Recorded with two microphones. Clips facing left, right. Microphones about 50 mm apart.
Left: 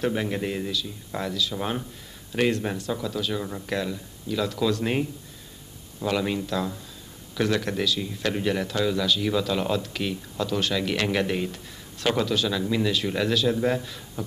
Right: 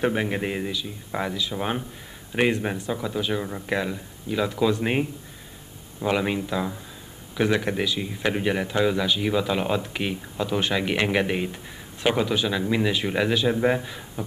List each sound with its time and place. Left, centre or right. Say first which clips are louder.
0.0 s a man's voice: right 2 dB; right